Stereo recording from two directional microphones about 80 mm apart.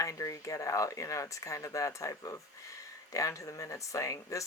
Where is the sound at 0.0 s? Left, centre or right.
Left.